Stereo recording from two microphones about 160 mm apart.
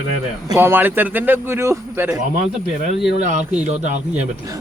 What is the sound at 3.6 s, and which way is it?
Speech, 45° right (ahead or behind).